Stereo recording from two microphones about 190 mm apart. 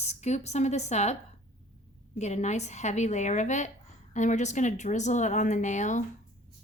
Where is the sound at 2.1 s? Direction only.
35° left (ahead or behind).